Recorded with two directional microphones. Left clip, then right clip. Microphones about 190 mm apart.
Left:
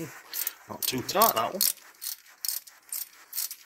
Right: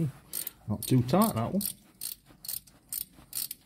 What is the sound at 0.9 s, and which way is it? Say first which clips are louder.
Speech: left 3 dB; 15° left (ahead or behind).